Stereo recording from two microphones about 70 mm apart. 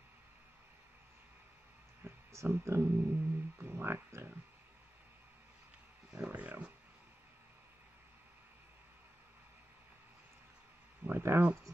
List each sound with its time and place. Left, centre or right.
2.0 s speech: right
6.1 s speech: centre
11.1 s a sound: right